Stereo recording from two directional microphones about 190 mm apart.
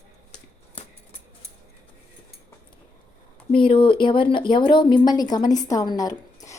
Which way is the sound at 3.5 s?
25° left (ahead or behind).